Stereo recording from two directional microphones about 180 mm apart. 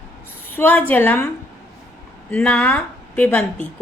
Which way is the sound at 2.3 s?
5° left (ahead or behind).